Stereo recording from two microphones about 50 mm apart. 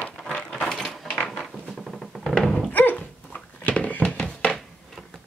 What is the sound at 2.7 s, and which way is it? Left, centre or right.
Dog, left.